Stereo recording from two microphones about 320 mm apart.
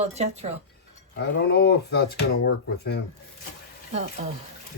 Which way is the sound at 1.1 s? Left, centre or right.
Left.